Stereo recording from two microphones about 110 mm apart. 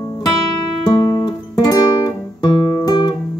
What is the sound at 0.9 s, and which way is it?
Guitar, 40° left (ahead or behind).